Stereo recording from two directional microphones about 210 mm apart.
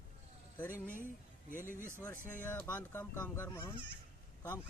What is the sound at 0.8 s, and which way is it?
Speech, 40° left (ahead or behind).